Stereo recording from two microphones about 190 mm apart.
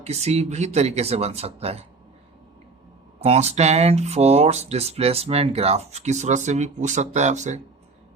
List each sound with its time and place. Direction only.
0.0 s speech: 35° right (ahead or behind)
3.2 s speech: 30° right (ahead or behind)